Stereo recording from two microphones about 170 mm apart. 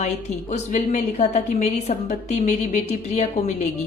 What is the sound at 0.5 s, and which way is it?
A woman's voice, 45° left (ahead or behind).